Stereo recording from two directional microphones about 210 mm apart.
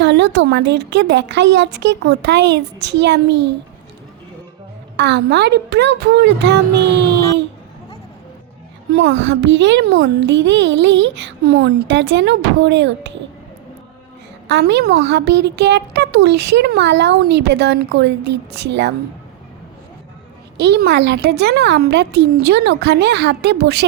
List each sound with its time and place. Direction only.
0.0 s a child's voice: 55° right (ahead or behind)
4.9 s a woman's voice: 55° right (ahead or behind)
8.9 s a child's voice: 55° right (ahead or behind)
14.4 s a woman's voice: 55° right (ahead or behind)
20.6 s a woman's voice: 50° right (ahead or behind)